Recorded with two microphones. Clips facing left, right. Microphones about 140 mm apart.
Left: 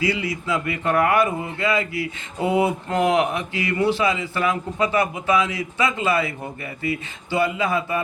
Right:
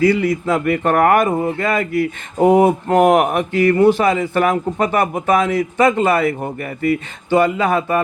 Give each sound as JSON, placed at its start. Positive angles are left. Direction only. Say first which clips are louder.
{"t": 0.0, "sound": "speech", "louder": "right 9 dB", "side_deg": -50}